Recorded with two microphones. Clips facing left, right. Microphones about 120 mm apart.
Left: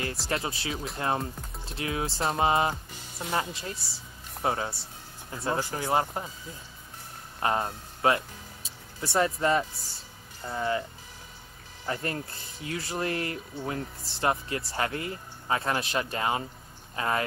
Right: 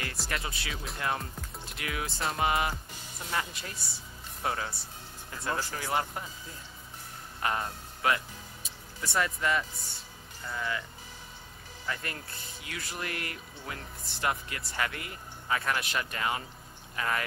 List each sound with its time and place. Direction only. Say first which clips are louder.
0.3 s speech: left 6 dB; 30° left (ahead or behind)
7.4 s speech: left 4 dB; 30° left (ahead or behind)
11.8 s speech: left 6 dB; 30° left (ahead or behind)